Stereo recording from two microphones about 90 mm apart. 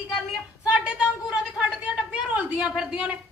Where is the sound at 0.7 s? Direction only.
15° right (ahead or behind).